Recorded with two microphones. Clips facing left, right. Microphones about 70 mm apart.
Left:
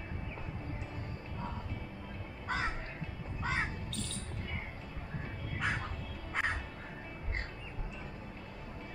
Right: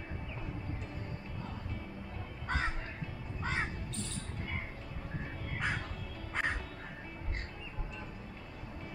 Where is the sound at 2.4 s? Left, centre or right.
Centre.